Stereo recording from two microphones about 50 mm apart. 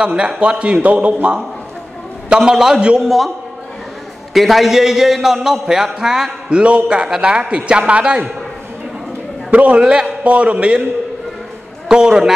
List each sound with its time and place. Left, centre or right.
0.0 s a man's voice: centre
2.2 s a man's voice: centre
4.3 s a man's voice: centre
6.5 s a man's voice: right
9.5 s a man's voice: right
11.9 s a man's voice: centre